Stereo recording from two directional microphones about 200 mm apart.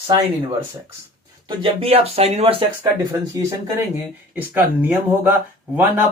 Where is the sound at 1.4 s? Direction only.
30° right (ahead or behind).